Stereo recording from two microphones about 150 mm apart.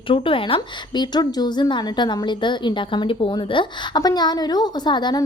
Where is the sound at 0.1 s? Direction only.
35° left (ahead or behind).